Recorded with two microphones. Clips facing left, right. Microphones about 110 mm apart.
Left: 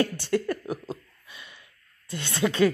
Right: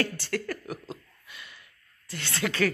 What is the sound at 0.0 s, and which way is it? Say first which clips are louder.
Speech: left 5 dB; 20° left (ahead or behind).